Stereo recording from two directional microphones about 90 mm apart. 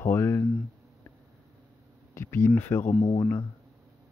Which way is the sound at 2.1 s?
30° left (ahead or behind).